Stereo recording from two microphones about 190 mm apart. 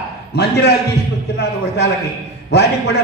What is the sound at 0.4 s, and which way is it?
Speech, 60° left (ahead or behind).